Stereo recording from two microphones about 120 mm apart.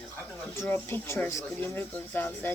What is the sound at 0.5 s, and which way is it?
Speech, 20° left (ahead or behind).